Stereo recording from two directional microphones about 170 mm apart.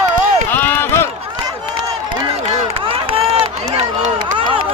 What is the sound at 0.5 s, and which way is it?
Run, 10° left (ahead or behind).